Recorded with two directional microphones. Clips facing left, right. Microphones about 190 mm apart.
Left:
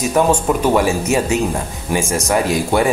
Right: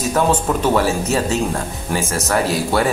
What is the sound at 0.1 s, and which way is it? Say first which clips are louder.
Speech: left 2 dB; 15° left (ahead or behind).